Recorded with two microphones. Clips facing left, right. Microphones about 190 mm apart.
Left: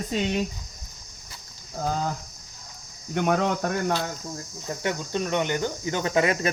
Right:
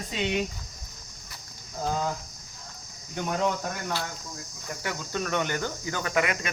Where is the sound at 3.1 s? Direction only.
65° left (ahead or behind).